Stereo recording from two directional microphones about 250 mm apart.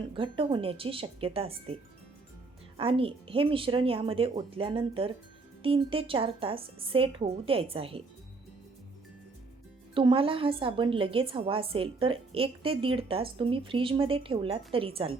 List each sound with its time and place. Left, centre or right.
0.1 s a woman's voice: centre
9.9 s a woman's voice: centre